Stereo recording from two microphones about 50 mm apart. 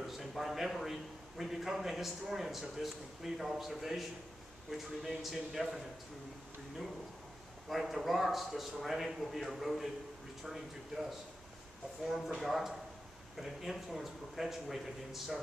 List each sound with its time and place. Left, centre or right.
0.0 s a sound: centre
1.4 s a man's voice: centre
7.7 s a man's voice: centre